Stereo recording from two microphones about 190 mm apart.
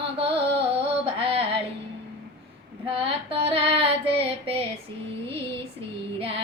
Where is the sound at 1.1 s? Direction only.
30° right (ahead or behind).